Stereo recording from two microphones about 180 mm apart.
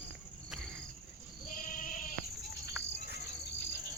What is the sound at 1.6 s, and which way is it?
Sheep, 50° left (ahead or behind).